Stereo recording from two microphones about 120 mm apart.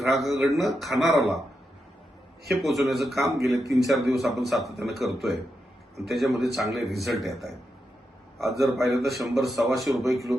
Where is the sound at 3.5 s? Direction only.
25° right (ahead or behind).